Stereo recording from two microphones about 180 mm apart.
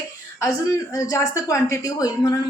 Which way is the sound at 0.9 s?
20° left (ahead or behind).